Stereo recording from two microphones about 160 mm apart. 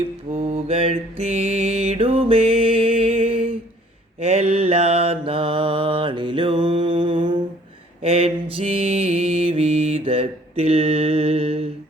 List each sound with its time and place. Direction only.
0.3 s mantra: 40° right (ahead or behind)